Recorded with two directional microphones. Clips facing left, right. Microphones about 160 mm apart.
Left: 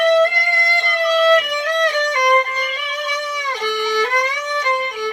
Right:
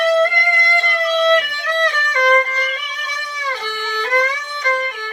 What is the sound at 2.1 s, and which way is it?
Music, 15° left (ahead or behind).